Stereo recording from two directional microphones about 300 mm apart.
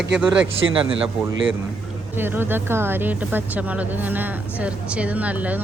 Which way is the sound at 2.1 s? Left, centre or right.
Centre.